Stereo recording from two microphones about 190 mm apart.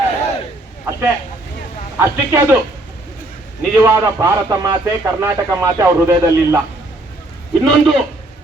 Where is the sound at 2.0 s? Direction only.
15° right (ahead or behind).